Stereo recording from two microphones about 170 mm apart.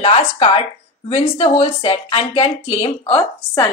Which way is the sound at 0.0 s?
35° left (ahead or behind).